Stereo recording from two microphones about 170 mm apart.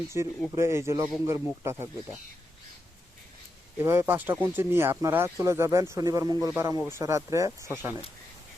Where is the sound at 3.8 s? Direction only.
15° right (ahead or behind).